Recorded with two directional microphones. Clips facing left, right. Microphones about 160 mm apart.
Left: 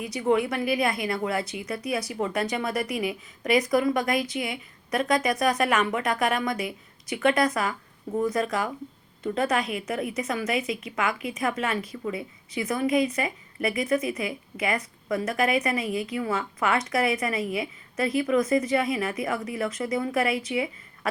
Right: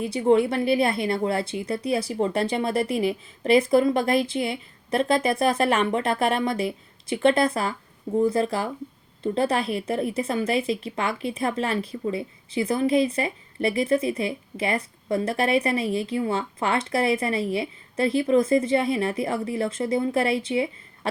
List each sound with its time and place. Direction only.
0.0 s a woman's voice: 30° right (ahead or behind)